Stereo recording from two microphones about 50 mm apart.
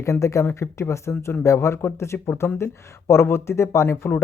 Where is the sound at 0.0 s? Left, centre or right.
Left.